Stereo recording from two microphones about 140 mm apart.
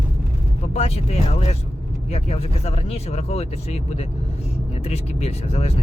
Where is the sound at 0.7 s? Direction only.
50° left (ahead or behind).